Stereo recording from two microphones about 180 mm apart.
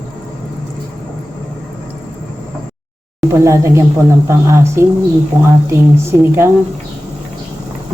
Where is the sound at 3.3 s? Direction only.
15° right (ahead or behind).